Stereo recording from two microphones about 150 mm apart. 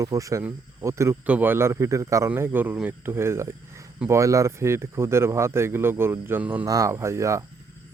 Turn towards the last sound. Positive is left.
turn(degrees=-20)  # may be behind; listen again after turning